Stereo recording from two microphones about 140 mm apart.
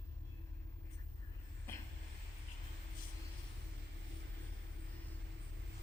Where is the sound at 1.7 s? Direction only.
15° left (ahead or behind).